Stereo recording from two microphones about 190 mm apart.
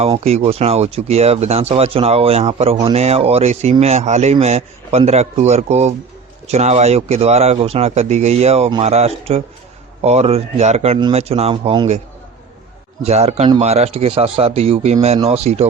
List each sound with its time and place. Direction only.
0.0 s speech: 35° right (ahead or behind)
13.1 s speech: 35° right (ahead or behind)